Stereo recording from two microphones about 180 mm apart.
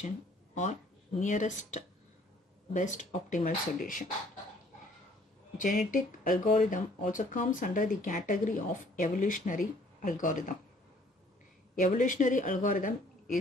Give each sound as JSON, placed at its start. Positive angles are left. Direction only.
{"t": 1.2, "sound": "speech", "side_deg": 45}
{"t": 5.6, "sound": "speech", "side_deg": 45}
{"t": 11.8, "sound": "speech", "side_deg": 45}